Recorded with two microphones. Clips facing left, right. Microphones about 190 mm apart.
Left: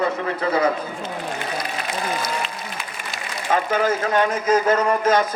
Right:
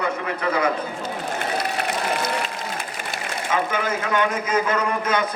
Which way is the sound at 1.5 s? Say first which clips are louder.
Right 2 dB; 65° right (ahead or behind).